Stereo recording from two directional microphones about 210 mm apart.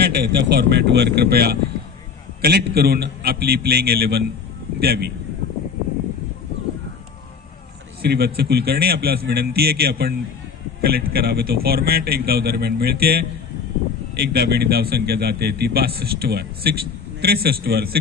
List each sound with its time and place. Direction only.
0.0 s a man's voice: 50° right (ahead or behind)
8.0 s a man's voice: 50° right (ahead or behind)